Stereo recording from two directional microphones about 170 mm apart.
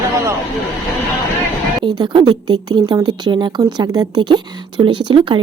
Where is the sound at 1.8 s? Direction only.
25° right (ahead or behind).